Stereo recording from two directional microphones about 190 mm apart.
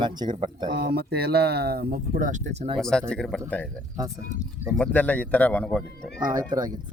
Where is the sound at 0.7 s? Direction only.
55° right (ahead or behind).